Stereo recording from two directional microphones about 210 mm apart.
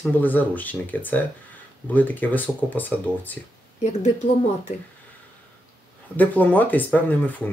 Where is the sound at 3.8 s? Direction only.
35° left (ahead or behind).